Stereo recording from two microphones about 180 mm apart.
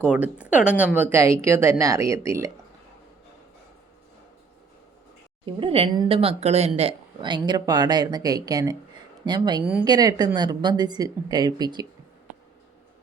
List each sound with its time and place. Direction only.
0.1 s speech: 5° right (ahead or behind)
5.5 s speech: 30° right (ahead or behind)